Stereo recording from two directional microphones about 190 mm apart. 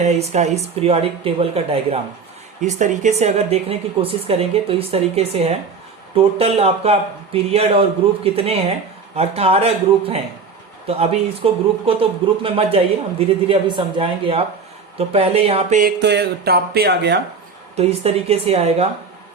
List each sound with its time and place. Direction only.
0.0 s speech: 35° right (ahead or behind)
15.8 s music: 60° right (ahead or behind)
17.7 s speech: 30° right (ahead or behind)